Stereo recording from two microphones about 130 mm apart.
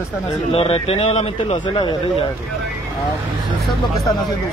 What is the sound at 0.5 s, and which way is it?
Speech, 50° left (ahead or behind).